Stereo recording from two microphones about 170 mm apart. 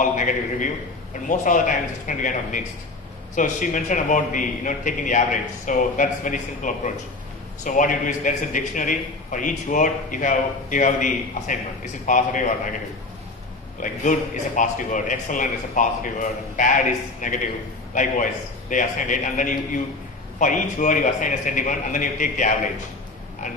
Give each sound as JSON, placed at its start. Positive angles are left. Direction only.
{"t": 0.0, "sound": "a man's voice", "side_deg": 50}
{"t": 13.7, "sound": "a man's voice", "side_deg": 50}
{"t": 18.7, "sound": "a man's voice", "side_deg": 50}